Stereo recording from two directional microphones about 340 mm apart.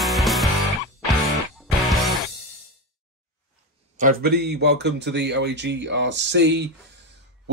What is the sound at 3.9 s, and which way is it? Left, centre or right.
Speech, right.